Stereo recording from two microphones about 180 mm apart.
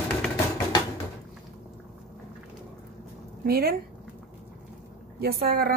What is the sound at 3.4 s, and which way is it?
Speech, 55° right (ahead or behind).